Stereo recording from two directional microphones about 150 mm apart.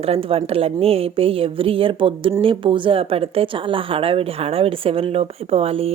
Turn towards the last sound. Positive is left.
turn(degrees=-40)  # may be behind; listen again after turning